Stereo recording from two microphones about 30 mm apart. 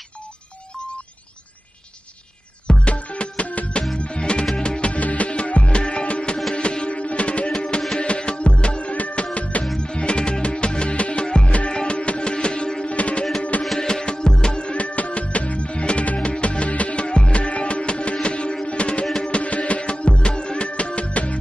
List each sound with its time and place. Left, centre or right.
2.9 s music: left
4.0 s music: left
4.9 s music: left
9.8 s music: left
12.8 s music: left
13.7 s music: left
14.8 s music: left
17.0 s music: left
17.4 s music: left